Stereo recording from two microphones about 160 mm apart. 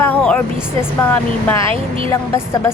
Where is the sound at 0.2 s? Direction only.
10° left (ahead or behind).